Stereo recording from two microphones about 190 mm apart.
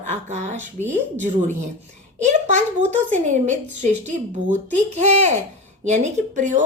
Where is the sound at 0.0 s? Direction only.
40° right (ahead or behind).